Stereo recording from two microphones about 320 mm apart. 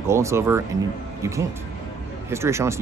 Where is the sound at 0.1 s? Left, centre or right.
Centre.